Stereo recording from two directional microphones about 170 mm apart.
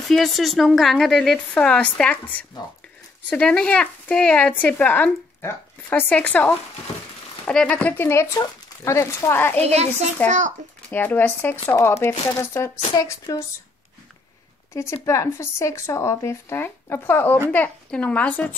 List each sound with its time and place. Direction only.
0.1 s speech: centre (ahead or behind)
9.6 s a woman's voice: 40° right (ahead or behind)
10.2 s speech: 10° left (ahead or behind)
14.7 s a woman's voice: 15° left (ahead or behind)